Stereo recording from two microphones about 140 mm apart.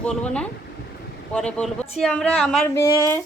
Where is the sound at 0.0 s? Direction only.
10° left (ahead or behind).